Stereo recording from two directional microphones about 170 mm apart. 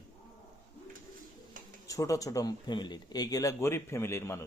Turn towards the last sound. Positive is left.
turn(degrees=15)  # may be behind; listen again after turning